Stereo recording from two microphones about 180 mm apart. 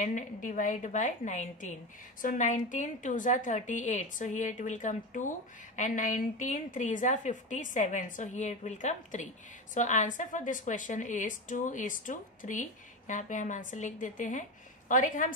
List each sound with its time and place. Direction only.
0.0 s a woman's voice: 45° left (ahead or behind)